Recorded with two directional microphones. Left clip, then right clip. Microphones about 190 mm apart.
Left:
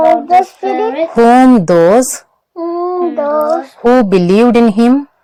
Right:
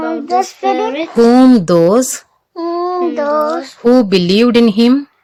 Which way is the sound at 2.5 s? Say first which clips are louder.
Left 1 dB; 40° right (ahead or behind).